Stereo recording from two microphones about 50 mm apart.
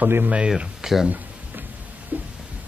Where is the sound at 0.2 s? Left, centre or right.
Right.